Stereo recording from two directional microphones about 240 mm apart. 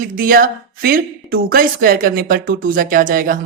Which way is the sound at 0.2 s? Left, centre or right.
Right.